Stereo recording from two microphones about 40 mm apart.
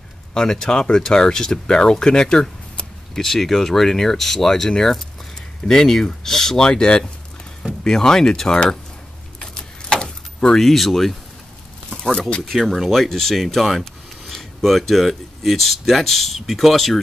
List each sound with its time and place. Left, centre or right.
0.3 s speech: centre
9.4 s keys jangling: centre
10.6 s speech: centre
12.0 s speech: left
12.4 s speech: centre